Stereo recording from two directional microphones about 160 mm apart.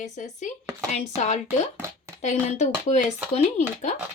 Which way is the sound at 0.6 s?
20° right (ahead or behind).